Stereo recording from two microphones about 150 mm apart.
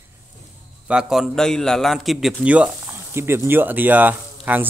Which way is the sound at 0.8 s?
5° right (ahead or behind).